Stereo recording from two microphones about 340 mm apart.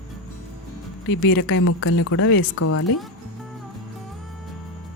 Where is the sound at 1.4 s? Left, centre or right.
Left.